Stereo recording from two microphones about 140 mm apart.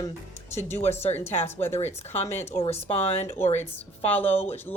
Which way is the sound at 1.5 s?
15° left (ahead or behind).